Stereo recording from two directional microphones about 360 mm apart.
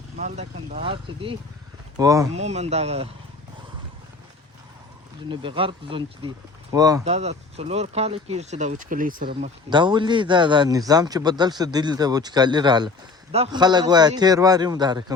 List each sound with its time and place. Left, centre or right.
0.2 s speech: centre
5.3 s speech: centre